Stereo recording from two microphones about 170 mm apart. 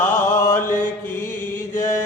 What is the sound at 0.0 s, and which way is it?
Mantra, 10° left (ahead or behind).